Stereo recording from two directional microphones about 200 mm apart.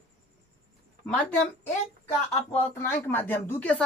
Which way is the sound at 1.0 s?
5° left (ahead or behind).